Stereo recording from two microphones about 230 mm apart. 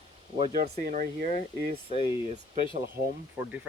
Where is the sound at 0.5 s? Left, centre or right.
Right.